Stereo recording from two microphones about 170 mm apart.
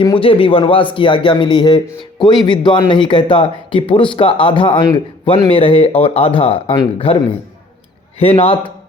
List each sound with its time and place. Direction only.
0.0 s a man's voice: 30° left (ahead or behind)
8.2 s a man's voice: 35° left (ahead or behind)